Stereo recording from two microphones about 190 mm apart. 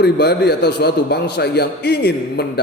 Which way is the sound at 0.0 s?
60° left (ahead or behind).